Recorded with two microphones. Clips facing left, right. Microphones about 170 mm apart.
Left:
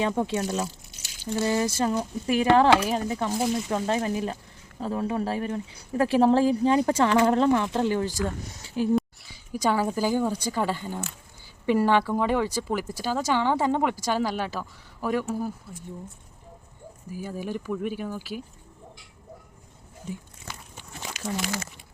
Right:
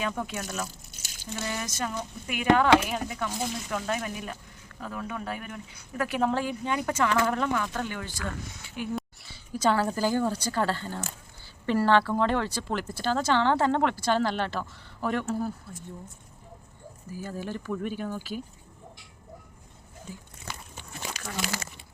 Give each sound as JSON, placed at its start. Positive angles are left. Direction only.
{"t": 0.0, "sound": "speech", "side_deg": 25}
{"t": 0.9, "sound": "a sound", "side_deg": -45}
{"t": 1.4, "sound": "speech", "side_deg": 30}
{"t": 9.3, "sound": "speech", "side_deg": 15}
{"t": 17.1, "sound": "speech", "side_deg": 10}